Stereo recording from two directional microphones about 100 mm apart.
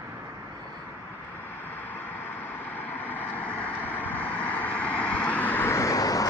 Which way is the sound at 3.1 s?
15° left (ahead or behind).